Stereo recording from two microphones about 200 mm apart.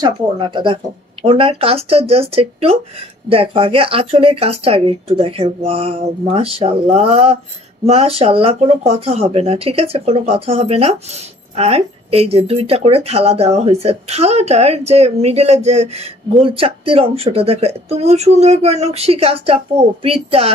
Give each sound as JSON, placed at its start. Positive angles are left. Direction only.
{"t": 0.0, "sound": "speech", "side_deg": -25}